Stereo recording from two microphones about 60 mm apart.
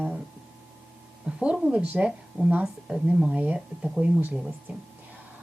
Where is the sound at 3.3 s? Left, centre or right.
Right.